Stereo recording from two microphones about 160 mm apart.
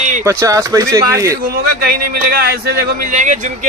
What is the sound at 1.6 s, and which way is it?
Speech, 70° right (ahead or behind).